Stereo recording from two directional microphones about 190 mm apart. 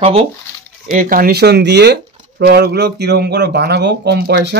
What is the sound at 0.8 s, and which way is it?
A man's voice, 45° right (ahead or behind).